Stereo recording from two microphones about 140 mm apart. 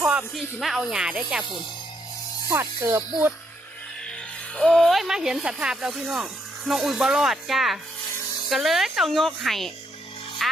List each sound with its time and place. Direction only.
0.0 s music: 10° right (ahead or behind)
0.3 s speech: centre (ahead or behind)
2.5 s speech: 20° right (ahead or behind)
4.5 s speech: 5° left (ahead or behind)
10.4 s music: centre (ahead or behind)